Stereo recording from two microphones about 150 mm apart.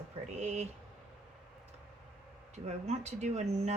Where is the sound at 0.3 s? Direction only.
50° right (ahead or behind).